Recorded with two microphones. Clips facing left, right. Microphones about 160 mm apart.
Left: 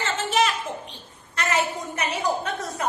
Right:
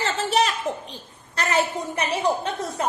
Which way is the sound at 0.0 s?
35° right (ahead or behind).